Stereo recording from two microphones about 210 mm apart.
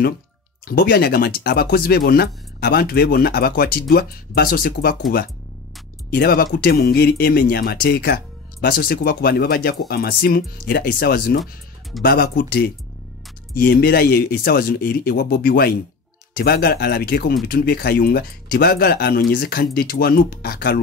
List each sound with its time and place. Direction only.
0.7 s speech: 45° left (ahead or behind)
6.0 s speech: 45° left (ahead or behind)